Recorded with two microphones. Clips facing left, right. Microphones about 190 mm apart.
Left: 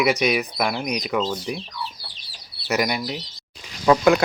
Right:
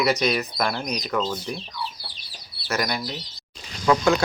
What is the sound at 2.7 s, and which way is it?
Speech, 15° left (ahead or behind).